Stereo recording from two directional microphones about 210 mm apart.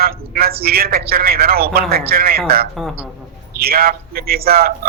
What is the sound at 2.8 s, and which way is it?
Speech, centre (ahead or behind).